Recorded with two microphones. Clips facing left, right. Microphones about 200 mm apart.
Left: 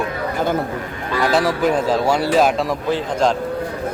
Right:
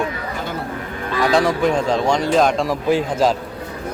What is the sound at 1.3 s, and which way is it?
A man's voice, 5° left (ahead or behind).